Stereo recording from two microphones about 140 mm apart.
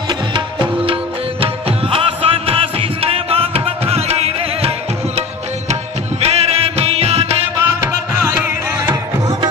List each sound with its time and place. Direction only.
0.1 s music: 35° right (ahead or behind)
6.2 s music: 50° right (ahead or behind)
7.6 s music: 20° right (ahead or behind)